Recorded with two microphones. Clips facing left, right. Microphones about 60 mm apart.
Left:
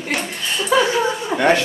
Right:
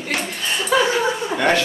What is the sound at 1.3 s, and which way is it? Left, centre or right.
Speech, left.